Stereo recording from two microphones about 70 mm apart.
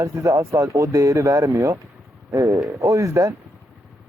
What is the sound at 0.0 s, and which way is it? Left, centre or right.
Speech, right.